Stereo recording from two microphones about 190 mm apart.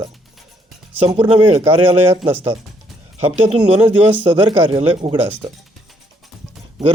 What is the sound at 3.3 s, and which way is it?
Speech, 30° right (ahead or behind).